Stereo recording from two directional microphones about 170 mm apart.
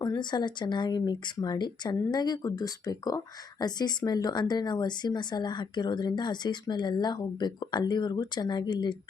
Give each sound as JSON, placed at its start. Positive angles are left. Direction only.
{"t": 0.0, "sound": "speech", "side_deg": 25}